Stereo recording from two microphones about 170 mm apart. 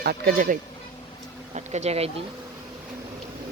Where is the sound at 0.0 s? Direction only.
65° right (ahead or behind).